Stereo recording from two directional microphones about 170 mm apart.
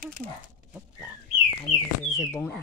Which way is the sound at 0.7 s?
10° right (ahead or behind).